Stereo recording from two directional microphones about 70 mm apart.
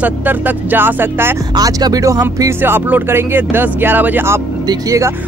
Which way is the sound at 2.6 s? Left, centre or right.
Right.